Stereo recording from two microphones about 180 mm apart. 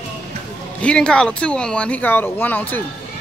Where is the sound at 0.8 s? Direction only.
5° left (ahead or behind).